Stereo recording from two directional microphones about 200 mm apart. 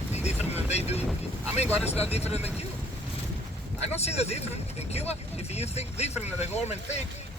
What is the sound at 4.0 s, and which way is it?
Speech, 30° left (ahead or behind).